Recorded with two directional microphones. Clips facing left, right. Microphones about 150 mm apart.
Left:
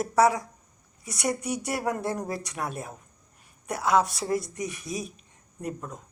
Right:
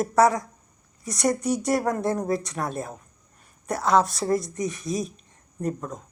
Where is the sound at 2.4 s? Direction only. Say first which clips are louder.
Right 4 dB; 10° left (ahead or behind).